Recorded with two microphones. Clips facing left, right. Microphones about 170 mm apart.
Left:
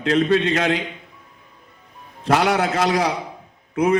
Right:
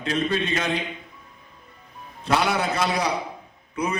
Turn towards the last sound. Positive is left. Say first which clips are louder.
# left 9 dB
turn(degrees=90)